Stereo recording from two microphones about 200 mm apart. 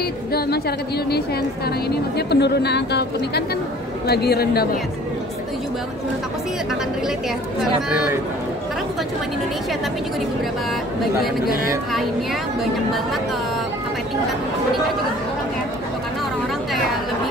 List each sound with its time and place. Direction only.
0.3 s a woman's voice: 50° left (ahead or behind)